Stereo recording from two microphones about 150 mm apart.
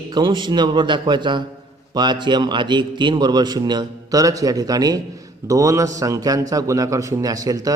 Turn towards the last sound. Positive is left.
turn(degrees=-25)  # may be behind; listen again after turning